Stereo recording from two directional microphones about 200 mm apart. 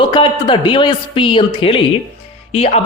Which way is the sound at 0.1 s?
25° left (ahead or behind).